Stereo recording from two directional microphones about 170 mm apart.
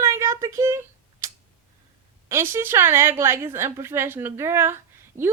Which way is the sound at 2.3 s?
15° right (ahead or behind).